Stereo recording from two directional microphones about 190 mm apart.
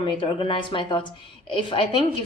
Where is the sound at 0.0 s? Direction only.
25° left (ahead or behind).